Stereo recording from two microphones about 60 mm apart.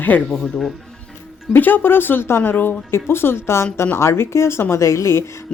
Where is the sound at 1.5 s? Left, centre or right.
Left.